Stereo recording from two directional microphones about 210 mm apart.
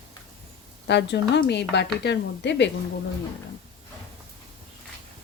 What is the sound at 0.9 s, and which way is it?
A woman's voice, 55° left (ahead or behind).